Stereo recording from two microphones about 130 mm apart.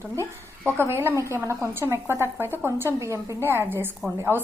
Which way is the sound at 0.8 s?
20° right (ahead or behind).